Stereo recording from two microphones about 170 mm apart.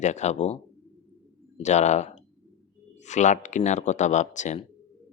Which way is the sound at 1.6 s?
45° left (ahead or behind).